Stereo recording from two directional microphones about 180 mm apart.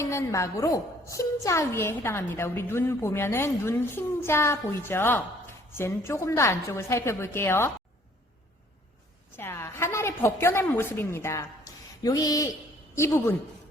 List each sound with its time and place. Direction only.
0.0 s a woman's voice: 15° left (ahead or behind)
9.3 s a woman's voice: 15° left (ahead or behind)